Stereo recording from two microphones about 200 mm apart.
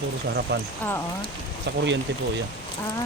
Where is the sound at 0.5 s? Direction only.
55° right (ahead or behind).